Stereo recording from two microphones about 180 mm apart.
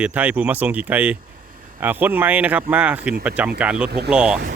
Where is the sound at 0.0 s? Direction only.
10° right (ahead or behind).